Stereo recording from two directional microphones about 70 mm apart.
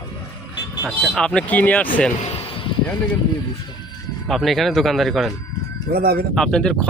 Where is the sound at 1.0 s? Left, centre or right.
Centre.